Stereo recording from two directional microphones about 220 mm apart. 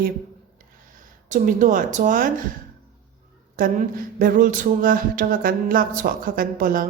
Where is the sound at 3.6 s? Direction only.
40° right (ahead or behind).